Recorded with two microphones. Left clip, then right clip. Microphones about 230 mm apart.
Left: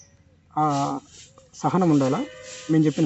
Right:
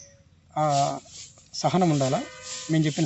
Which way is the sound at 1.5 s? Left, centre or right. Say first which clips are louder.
Left 2 dB; right.